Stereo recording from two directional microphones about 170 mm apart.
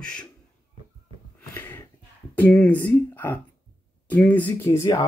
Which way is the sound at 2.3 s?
10° left (ahead or behind).